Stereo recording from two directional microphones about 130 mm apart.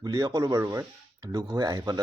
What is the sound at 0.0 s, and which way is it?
Speech, 30° right (ahead or behind).